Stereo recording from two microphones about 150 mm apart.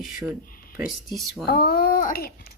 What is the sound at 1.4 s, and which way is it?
Speech, 90° left.